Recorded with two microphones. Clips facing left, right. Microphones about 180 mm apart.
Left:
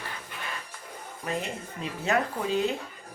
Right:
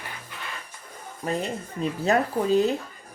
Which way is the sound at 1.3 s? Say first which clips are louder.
Right 4 dB; 35° right (ahead or behind).